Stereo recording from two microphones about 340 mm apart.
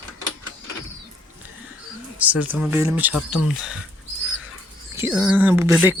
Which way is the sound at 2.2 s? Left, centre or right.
Centre.